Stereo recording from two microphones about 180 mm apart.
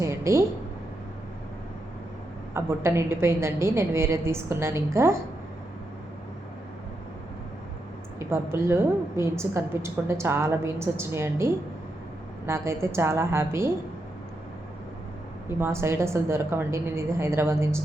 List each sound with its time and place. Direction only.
0.0 s a sound: 15° right (ahead or behind)
2.5 s a woman's voice: 15° right (ahead or behind)
8.2 s a woman's voice: 15° right (ahead or behind)
15.4 s a woman's voice: 15° right (ahead or behind)